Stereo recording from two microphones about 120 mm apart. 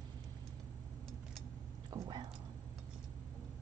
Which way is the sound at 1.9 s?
35° right (ahead or behind).